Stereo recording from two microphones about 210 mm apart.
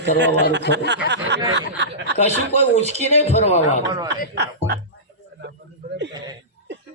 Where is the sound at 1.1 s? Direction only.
55° right (ahead or behind).